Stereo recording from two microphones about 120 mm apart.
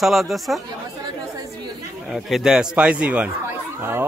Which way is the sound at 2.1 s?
Centre (ahead or behind).